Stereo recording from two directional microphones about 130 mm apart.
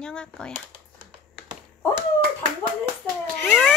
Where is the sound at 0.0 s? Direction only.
5° left (ahead or behind).